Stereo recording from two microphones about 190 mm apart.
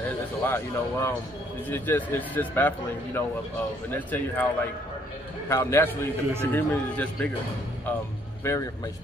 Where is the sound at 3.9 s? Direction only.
10° left (ahead or behind).